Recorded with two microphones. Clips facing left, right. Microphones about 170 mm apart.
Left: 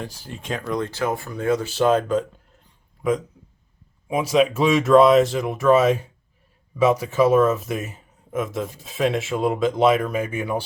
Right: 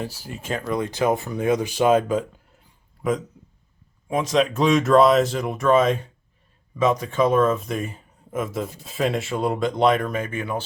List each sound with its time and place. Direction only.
0.0 s speech: 5° right (ahead or behind)
0.9 s speech: 15° right (ahead or behind); by 10.6 s 10° left (ahead or behind)